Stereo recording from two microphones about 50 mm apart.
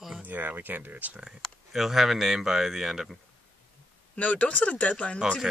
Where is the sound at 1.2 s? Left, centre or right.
Centre.